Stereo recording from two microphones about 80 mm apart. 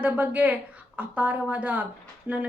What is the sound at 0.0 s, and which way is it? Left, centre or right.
A woman's voice, right.